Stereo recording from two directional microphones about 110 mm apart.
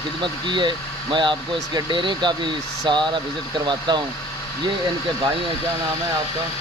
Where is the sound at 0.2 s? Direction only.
45° right (ahead or behind).